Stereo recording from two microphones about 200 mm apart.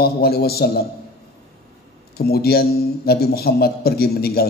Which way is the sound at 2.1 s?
50° left (ahead or behind).